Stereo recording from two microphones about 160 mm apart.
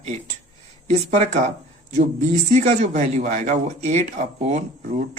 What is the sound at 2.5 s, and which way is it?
Speech, 50° right (ahead or behind).